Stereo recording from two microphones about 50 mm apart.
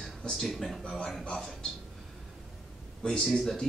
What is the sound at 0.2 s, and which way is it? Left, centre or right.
Speech, centre.